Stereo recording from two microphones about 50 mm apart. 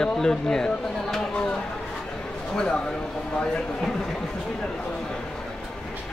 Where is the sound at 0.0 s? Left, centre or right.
Centre.